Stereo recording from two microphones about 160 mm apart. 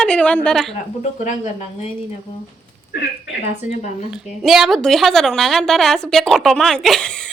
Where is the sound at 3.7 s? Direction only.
45° left (ahead or behind).